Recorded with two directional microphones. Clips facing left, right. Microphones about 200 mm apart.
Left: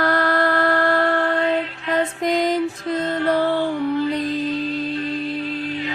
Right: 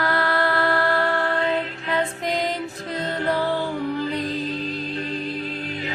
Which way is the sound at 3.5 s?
40° right (ahead or behind).